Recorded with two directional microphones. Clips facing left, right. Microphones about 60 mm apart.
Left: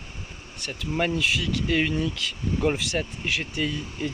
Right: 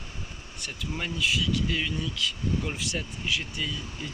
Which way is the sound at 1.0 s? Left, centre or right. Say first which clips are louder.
Left 4 dB; left.